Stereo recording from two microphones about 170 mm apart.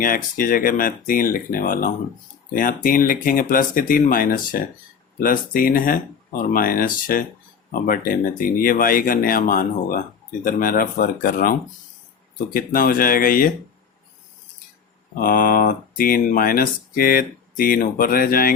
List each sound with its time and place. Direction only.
0.0 s speech: 55° left (ahead or behind)
12.5 s speech: 60° left (ahead or behind)
15.2 s speech: 55° left (ahead or behind)